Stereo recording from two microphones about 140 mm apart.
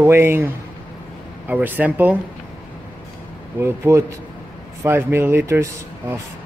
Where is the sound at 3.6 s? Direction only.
20° right (ahead or behind).